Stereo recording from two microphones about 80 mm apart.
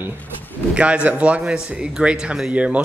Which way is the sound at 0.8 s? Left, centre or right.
Centre.